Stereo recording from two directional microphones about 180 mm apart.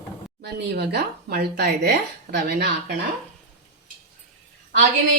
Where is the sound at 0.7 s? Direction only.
65° right (ahead or behind).